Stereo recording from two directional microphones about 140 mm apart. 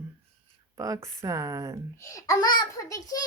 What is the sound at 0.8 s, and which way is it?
Speech, 20° right (ahead or behind).